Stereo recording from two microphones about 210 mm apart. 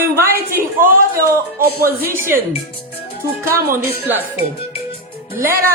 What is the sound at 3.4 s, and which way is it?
A woman's voice, 15° right (ahead or behind).